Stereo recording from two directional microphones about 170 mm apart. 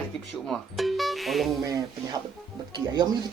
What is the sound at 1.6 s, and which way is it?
Speech, 20° right (ahead or behind).